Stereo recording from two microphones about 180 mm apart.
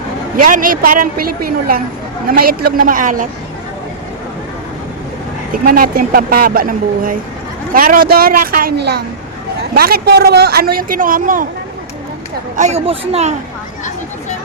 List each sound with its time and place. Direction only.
0.3 s a woman's voice: 50° right (ahead or behind)
5.6 s a woman's voice: 55° right (ahead or behind)
12.5 s speech: 40° right (ahead or behind)